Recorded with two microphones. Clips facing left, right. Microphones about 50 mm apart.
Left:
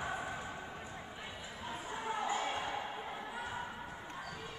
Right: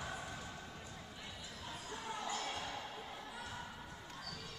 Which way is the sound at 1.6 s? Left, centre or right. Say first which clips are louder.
Left 6 dB; left.